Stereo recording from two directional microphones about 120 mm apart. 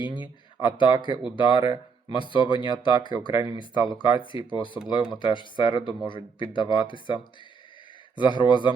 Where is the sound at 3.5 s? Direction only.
40° left (ahead or behind).